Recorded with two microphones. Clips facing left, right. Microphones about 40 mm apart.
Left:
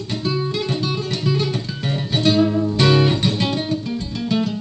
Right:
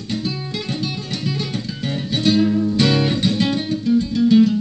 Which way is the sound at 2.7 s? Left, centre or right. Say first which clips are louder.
Left 1 dB; left.